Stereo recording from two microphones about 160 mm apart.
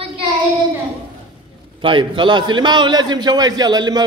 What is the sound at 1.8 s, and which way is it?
A man's voice, 30° right (ahead or behind).